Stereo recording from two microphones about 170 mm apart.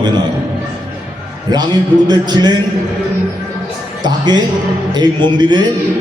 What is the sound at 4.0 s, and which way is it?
A man's voice, 25° right (ahead or behind).